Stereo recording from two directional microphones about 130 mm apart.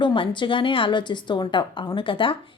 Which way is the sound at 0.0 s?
40° left (ahead or behind).